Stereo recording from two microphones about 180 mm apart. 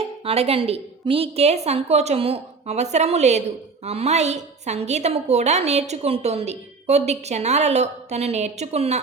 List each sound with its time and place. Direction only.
0.0 s a woman's voice: 35° right (ahead or behind)